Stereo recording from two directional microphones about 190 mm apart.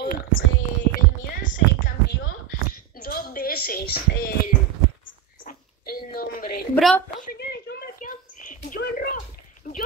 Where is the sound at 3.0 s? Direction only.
50° left (ahead or behind).